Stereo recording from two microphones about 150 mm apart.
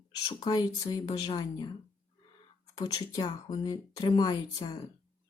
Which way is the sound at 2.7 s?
25° left (ahead or behind).